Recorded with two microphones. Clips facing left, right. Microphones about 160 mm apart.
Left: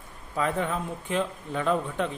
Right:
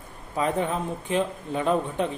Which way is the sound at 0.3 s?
20° right (ahead or behind).